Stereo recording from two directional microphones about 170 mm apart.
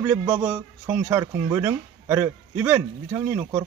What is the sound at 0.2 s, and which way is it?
Speech, 15° right (ahead or behind).